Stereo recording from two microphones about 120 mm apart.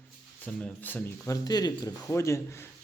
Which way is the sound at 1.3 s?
35° left (ahead or behind).